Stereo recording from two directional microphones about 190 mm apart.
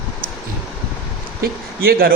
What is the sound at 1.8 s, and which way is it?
Speech, 50° right (ahead or behind).